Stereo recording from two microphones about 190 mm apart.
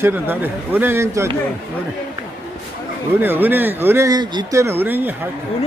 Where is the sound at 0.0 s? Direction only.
10° right (ahead or behind).